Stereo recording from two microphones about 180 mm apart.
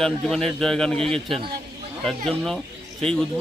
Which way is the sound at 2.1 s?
Centre (ahead or behind).